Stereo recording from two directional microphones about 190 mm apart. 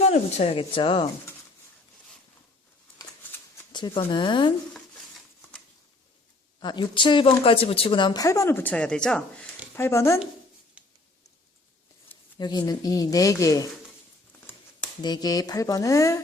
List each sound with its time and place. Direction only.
0.0 s speech: 35° left (ahead or behind)
3.7 s speech: 25° left (ahead or behind)
6.6 s speech: 25° left (ahead or behind)
10.8 s a sound: 5° right (ahead or behind)
12.4 s speech: 20° left (ahead or behind)
15.0 s speech: 20° left (ahead or behind)